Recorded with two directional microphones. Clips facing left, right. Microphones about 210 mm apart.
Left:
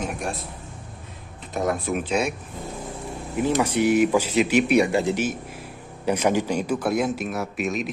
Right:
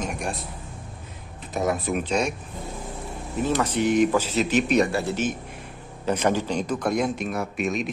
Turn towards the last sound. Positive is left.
turn(degrees=0)  # may be behind; listen again after turning